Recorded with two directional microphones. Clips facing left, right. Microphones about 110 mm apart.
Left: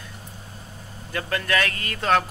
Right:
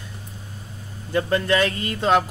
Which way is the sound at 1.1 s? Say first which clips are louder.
Right 5 dB; 25° right (ahead or behind).